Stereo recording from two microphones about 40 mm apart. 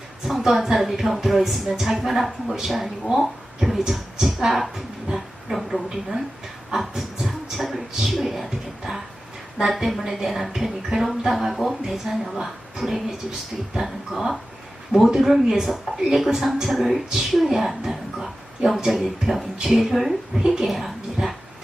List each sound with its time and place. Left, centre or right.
0.3 s a woman's voice: centre
6.7 s a sound: centre
8.4 s music: centre
9.6 s a woman's voice: centre